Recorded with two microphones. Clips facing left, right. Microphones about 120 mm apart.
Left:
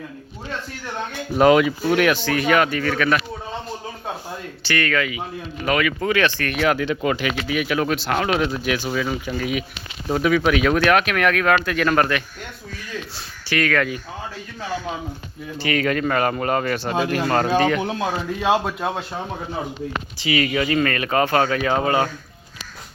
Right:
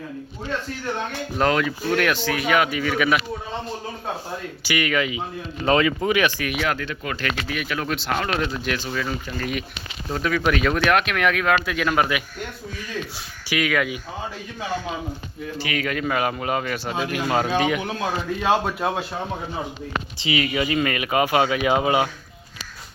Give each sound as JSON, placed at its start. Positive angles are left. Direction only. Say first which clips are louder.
{"t": 1.4, "sound": "speech", "louder": "left 7 dB", "side_deg": 10}
{"t": 4.6, "sound": "speech", "louder": "left 1 dB", "side_deg": -10}
{"t": 6.8, "sound": "speech", "louder": "left 8 dB", "side_deg": 25}
{"t": 7.2, "sound": "speech", "louder": "left 4 dB", "side_deg": 5}
{"t": 13.5, "sound": "speech", "louder": "left 2 dB", "side_deg": -10}
{"t": 15.6, "sound": "speech", "louder": "left 5 dB", "side_deg": -5}
{"t": 18.3, "sound": "speech", "louder": "left 1 dB", "side_deg": 5}
{"t": 20.1, "sound": "speech", "louder": "left 3 dB", "side_deg": -20}